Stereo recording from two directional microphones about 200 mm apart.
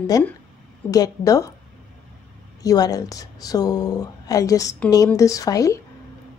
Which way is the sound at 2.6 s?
20° left (ahead or behind).